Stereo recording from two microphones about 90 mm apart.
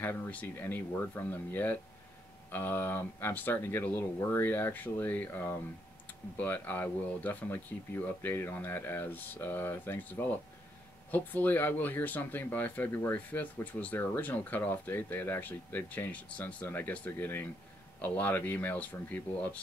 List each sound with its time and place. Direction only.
0.0 s speech: 20° left (ahead or behind)